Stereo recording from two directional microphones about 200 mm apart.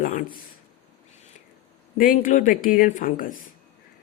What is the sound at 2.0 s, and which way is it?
Speech, 45° left (ahead or behind).